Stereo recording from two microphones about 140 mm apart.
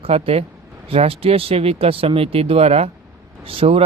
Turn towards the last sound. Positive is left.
turn(degrees=-45)  # may be behind; listen again after turning